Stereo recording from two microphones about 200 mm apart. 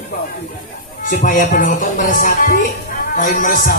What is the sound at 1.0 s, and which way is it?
A woman's voice, 40° left (ahead or behind).